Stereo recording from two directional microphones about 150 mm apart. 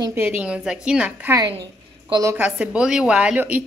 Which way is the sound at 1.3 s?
25° right (ahead or behind).